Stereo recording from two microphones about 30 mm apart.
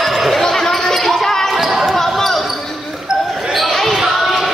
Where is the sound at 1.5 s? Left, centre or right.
Centre.